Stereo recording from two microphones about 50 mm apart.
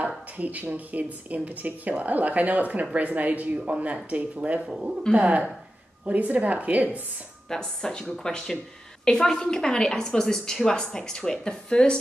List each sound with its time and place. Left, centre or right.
0.4 s speech: right
4.6 s speech: centre
5.1 s speech: right
7.4 s a woman's voice: centre